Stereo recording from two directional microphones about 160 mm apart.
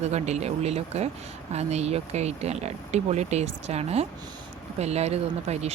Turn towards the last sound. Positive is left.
turn(degrees=-40)  # may be behind; listen again after turning